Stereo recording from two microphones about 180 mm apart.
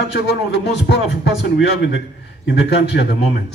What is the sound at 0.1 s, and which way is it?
A man's voice, 65° left (ahead or behind).